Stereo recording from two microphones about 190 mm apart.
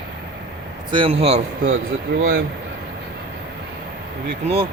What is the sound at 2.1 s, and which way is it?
Speech, 60° right (ahead or behind).